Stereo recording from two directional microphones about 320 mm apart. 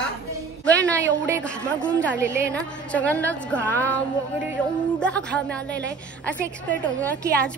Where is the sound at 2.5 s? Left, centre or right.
Centre.